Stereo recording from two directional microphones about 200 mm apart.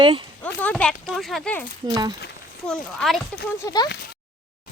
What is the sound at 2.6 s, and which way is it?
Speech, 5° left (ahead or behind).